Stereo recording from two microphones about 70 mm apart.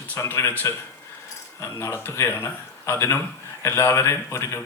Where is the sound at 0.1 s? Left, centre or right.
Left.